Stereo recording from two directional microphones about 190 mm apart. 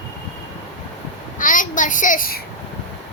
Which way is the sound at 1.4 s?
45° left (ahead or behind).